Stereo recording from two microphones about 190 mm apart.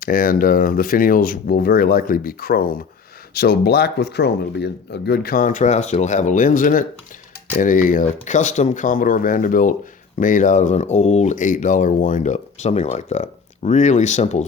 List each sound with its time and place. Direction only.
0.0 s speech: 50° left (ahead or behind)